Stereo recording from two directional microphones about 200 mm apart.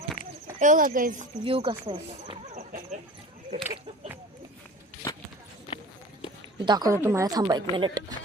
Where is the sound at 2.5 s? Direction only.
35° right (ahead or behind).